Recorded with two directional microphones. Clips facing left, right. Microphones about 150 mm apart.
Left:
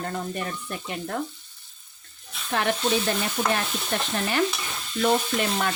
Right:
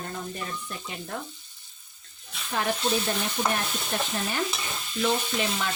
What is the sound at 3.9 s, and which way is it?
Stir, 90° left.